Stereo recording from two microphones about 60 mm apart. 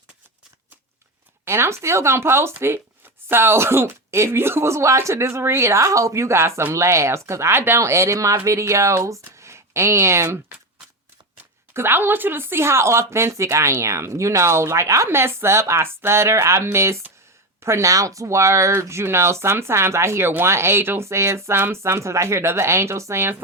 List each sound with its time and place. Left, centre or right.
1.5 s speech: right
11.7 s speech: right
17.9 s speech: right